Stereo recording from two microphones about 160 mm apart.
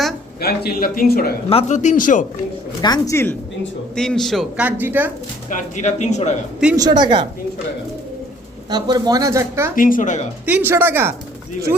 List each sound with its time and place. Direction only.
0.4 s speech: 75° left (ahead or behind)
1.5 s speech: 40° left (ahead or behind)
2.8 s speech: 20° left (ahead or behind)
3.9 s a man's voice: 5° left (ahead or behind)
4.6 s speech: 10° right (ahead or behind)
5.5 s speech: 50° left (ahead or behind)
6.7 s speech: 25° right (ahead or behind)
8.7 s speech: 25° right (ahead or behind)
9.7 s speech: 55° left (ahead or behind)
10.4 s speech: 10° right (ahead or behind)